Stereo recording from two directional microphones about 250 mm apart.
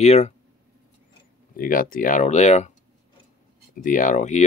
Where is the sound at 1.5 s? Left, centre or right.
Left.